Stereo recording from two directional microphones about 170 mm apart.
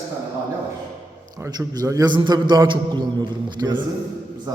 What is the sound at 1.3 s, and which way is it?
A man's voice, 15° right (ahead or behind).